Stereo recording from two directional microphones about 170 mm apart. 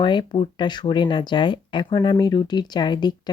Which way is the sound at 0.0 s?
30° left (ahead or behind).